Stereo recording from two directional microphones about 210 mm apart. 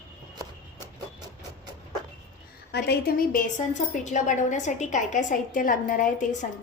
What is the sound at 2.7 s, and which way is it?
A woman's voice, 50° left (ahead or behind).